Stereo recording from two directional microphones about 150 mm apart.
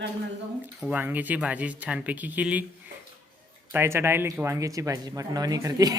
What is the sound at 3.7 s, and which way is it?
Speech, 15° right (ahead or behind).